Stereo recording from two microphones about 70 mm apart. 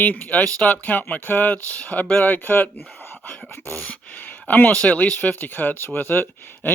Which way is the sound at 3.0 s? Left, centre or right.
Left.